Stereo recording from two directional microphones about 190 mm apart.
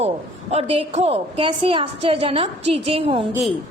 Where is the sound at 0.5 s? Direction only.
30° right (ahead or behind).